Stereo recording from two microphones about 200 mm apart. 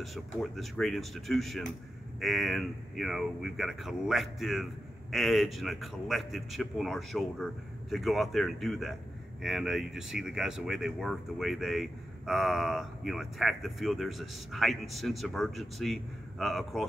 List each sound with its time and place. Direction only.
0.0 s speech: centre (ahead or behind)